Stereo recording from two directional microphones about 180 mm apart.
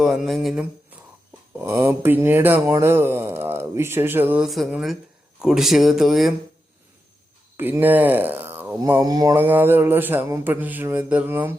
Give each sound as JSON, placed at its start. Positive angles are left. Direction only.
{"t": 0.0, "sound": "speech", "side_deg": 0}
{"t": 7.5, "sound": "speech", "side_deg": -10}